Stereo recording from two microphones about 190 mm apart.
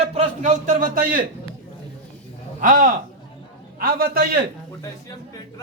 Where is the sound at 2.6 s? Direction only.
45° right (ahead or behind).